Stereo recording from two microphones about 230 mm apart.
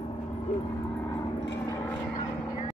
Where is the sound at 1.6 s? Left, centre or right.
Centre.